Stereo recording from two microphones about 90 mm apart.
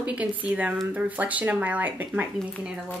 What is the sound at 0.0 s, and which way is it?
Speech, 15° right (ahead or behind).